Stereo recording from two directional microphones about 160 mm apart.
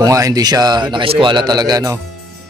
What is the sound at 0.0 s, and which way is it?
A man's voice, 20° right (ahead or behind).